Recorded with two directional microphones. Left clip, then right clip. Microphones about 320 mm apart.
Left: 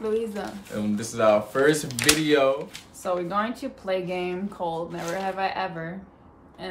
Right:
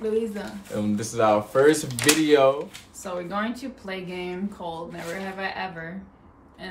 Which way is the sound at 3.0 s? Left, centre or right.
Centre.